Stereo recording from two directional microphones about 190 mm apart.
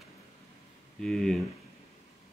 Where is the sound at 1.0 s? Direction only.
Centre (ahead or behind).